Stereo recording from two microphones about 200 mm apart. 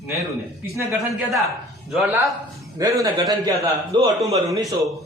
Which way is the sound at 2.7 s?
15° right (ahead or behind).